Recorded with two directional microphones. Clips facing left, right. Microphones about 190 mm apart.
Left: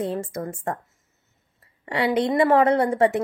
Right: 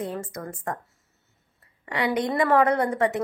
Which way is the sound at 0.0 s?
30° left (ahead or behind).